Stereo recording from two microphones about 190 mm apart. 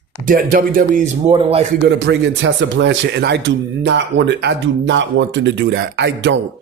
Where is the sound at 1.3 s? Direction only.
30° right (ahead or behind).